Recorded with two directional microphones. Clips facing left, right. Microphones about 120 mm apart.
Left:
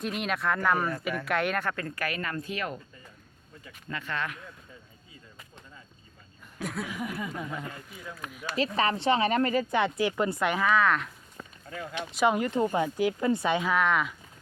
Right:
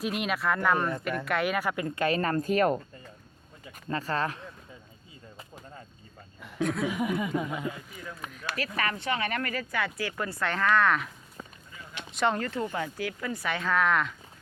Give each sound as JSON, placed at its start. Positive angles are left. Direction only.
{"t": 0.0, "sound": "speech", "side_deg": 0}
{"t": 2.0, "sound": "speech", "side_deg": -35}
{"t": 6.6, "sound": "speech", "side_deg": 5}
{"t": 6.9, "sound": "speech", "side_deg": -20}
{"t": 7.9, "sound": "speech", "side_deg": 5}
{"t": 8.5, "sound": "speech", "side_deg": 25}
{"t": 10.7, "sound": "a sound", "side_deg": 0}
{"t": 11.6, "sound": "a sound", "side_deg": 90}
{"t": 12.1, "sound": "speech", "side_deg": 10}
{"t": 13.7, "sound": "speech", "side_deg": 0}